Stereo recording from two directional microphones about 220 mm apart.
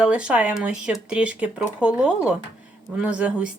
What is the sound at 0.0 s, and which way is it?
Speech, 5° right (ahead or behind).